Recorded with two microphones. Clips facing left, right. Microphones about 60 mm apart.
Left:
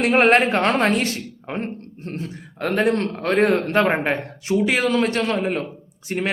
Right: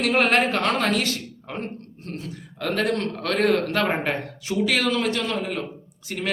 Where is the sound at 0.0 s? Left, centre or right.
Left.